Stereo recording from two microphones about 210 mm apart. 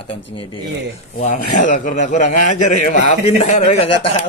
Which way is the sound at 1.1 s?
35° left (ahead or behind).